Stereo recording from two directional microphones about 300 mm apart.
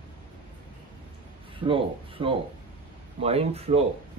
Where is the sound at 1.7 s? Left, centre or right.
Centre.